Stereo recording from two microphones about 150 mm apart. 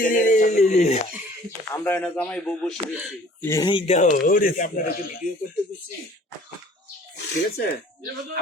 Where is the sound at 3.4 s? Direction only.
15° left (ahead or behind).